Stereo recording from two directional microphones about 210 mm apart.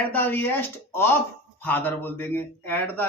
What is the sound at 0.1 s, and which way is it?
Speech, 10° left (ahead or behind).